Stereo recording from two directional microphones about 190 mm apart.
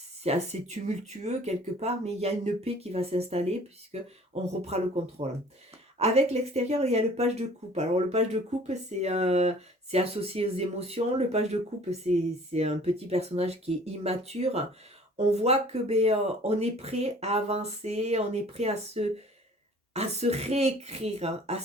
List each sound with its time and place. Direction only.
0.3 s speech: 35° right (ahead or behind)